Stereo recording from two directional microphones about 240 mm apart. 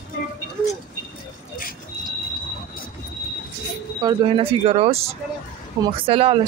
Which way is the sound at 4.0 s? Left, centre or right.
Centre.